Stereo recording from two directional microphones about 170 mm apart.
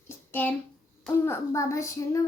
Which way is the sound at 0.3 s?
10° left (ahead or behind).